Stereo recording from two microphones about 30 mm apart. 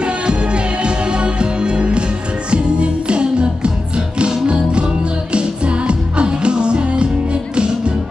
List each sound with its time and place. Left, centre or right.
0.0 s music: right